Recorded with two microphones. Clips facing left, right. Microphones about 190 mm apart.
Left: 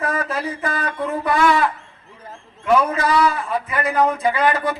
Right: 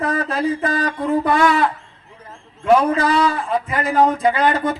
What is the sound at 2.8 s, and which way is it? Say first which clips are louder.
Speech: right 1 dB; 30° right (ahead or behind).